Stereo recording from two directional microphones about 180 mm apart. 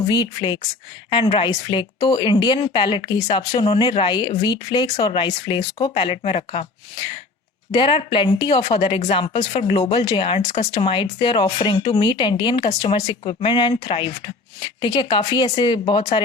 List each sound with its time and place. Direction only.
0.1 s a woman's voice: 25° left (ahead or behind)
13.7 s speech: 35° left (ahead or behind)
14.6 s a woman's voice: 25° left (ahead or behind)
15.0 s speech: 35° left (ahead or behind)
15.5 s a woman's voice: 25° left (ahead or behind)